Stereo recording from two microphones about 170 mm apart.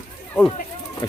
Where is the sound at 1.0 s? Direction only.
25° left (ahead or behind).